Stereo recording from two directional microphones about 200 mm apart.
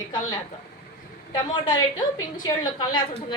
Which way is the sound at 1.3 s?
20° left (ahead or behind).